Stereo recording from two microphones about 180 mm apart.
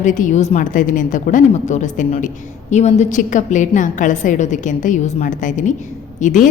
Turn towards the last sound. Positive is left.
turn(degrees=45)  # may be behind; listen again after turning